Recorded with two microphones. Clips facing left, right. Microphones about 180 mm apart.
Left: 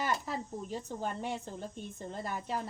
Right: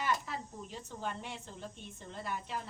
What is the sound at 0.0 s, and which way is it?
A woman's voice, 40° left (ahead or behind).